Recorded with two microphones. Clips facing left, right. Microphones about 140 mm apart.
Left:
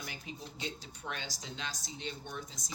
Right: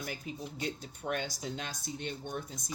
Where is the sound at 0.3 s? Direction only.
45° right (ahead or behind).